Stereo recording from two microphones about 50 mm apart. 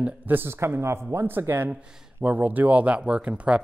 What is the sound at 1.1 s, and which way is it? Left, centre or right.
Speech, right.